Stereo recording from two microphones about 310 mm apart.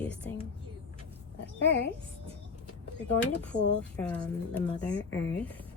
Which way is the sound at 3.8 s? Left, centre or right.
Centre.